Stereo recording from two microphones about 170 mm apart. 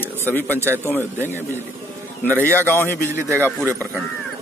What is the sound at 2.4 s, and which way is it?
Speech, 15° left (ahead or behind).